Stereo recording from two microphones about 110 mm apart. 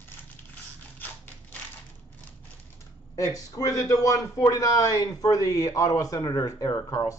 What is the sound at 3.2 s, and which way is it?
A man's voice, 35° left (ahead or behind).